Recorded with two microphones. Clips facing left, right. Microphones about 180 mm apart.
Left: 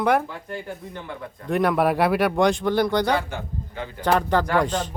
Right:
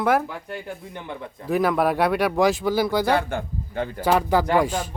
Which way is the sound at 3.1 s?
50° right (ahead or behind).